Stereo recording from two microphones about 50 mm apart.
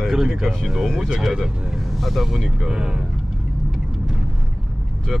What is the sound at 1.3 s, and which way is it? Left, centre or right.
Speech, centre.